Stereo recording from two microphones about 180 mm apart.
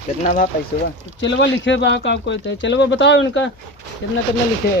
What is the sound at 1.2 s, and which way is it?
Speech, 85° left.